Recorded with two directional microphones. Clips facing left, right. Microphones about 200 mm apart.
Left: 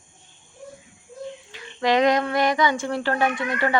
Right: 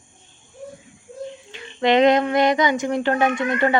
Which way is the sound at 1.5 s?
25° right (ahead or behind).